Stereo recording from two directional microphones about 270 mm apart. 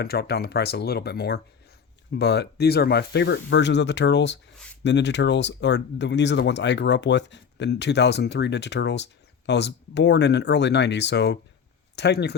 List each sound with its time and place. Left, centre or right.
0.0 s speech: left